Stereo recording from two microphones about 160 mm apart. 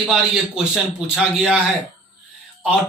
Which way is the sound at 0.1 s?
5° right (ahead or behind).